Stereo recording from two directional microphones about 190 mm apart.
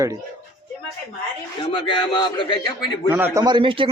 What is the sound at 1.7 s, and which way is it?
A man's voice, 25° left (ahead or behind).